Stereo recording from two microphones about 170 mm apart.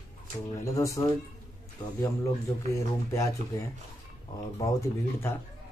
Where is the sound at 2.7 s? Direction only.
20° left (ahead or behind).